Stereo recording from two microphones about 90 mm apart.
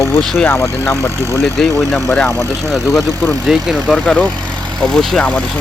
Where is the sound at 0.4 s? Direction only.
30° left (ahead or behind).